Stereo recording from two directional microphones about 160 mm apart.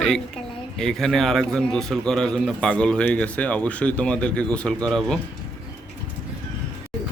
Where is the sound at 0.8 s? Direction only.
5° left (ahead or behind).